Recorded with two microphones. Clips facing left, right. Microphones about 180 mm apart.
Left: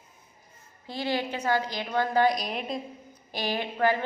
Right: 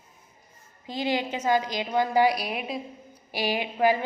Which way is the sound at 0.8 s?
15° right (ahead or behind).